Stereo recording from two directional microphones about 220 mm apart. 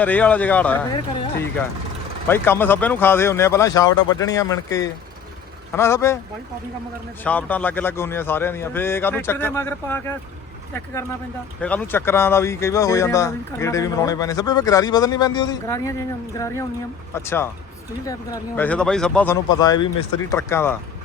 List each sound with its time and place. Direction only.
0.0 s speech: 5° left (ahead or behind)
2.2 s speech: 10° left (ahead or behind)
7.3 s speech: 5° left (ahead or behind)
11.6 s speech: 5° left (ahead or behind)
19.5 s speech: 20° left (ahead or behind)